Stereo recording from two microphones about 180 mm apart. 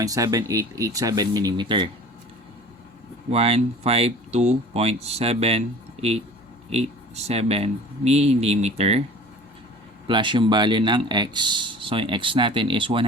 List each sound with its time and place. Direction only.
0.0 s speech: 20° right (ahead or behind)
3.2 s speech: 35° right (ahead or behind)
10.1 s speech: 25° right (ahead or behind)